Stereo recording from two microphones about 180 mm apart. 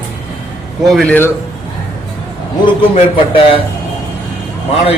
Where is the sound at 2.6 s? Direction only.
30° left (ahead or behind).